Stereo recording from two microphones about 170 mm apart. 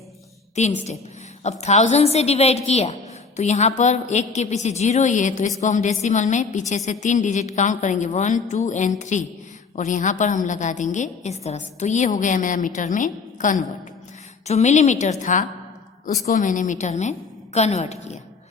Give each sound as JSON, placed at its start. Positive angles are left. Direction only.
{"t": 0.6, "sound": "a woman's voice", "side_deg": 40}